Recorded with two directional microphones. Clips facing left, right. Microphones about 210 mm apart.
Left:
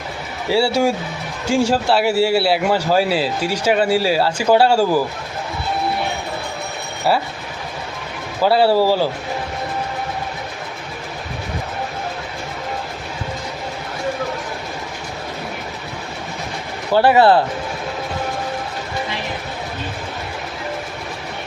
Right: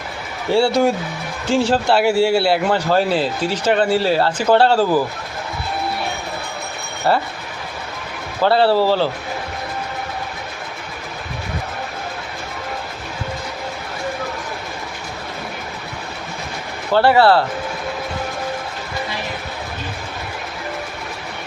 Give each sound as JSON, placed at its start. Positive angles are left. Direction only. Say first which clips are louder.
{"t": 0.4, "sound": "a man's voice", "louder": "right 1 dB", "side_deg": 5}
{"t": 7.1, "sound": "a man's voice", "louder": "even", "side_deg": 5}
{"t": 8.4, "sound": "speech", "louder": "even", "side_deg": 10}
{"t": 16.9, "sound": "speech", "louder": "left 1 dB", "side_deg": 15}